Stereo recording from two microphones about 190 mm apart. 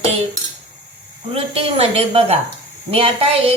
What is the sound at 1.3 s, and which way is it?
Speech, 30° right (ahead or behind).